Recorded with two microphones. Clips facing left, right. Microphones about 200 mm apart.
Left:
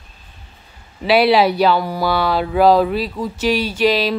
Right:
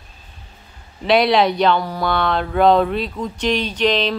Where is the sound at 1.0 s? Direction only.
5° left (ahead or behind).